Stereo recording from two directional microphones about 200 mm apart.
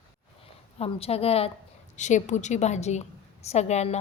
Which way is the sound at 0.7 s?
30° left (ahead or behind).